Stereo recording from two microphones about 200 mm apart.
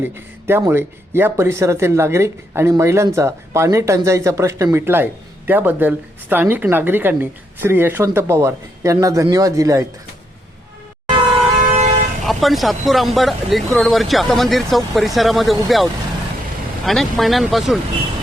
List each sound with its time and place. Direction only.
0.0 s speech: 10° right (ahead or behind)
11.1 s vehicle: 30° right (ahead or behind)
12.2 s speech: centre (ahead or behind)